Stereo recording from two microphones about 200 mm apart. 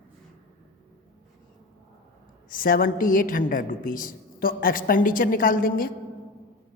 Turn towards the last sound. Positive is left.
turn(degrees=45)  # may be behind; listen again after turning